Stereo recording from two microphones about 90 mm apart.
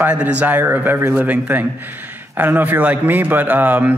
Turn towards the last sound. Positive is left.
turn(degrees=-20)  # may be behind; listen again after turning